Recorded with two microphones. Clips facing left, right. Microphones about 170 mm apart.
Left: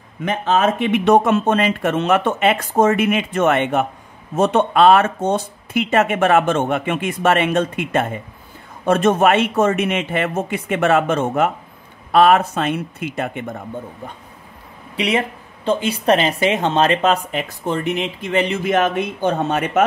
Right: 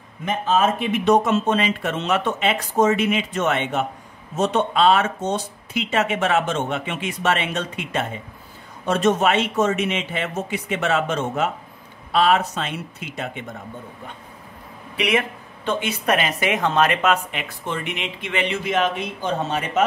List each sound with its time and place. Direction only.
0.2 s speech: 70° left (ahead or behind); by 13.6 s 50° left (ahead or behind)
15.0 s speech: 30° left (ahead or behind); by 19.8 s 55° left (ahead or behind)